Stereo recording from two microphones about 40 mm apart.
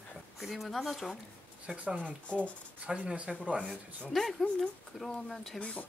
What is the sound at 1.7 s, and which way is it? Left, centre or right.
Speech, right.